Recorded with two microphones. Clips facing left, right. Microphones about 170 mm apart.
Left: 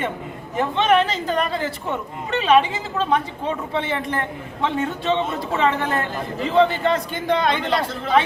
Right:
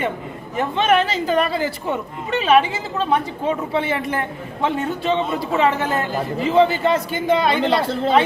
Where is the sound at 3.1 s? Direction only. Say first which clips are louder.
Right 3 dB; 5° right (ahead or behind).